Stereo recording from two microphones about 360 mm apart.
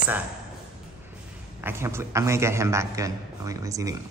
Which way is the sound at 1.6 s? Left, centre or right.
Centre.